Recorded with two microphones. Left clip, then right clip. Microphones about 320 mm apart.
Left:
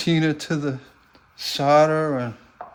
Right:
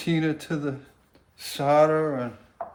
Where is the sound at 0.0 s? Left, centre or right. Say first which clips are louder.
Left 4 dB; left.